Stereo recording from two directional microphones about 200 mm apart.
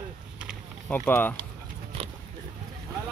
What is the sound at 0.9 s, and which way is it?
Speech, 10° left (ahead or behind).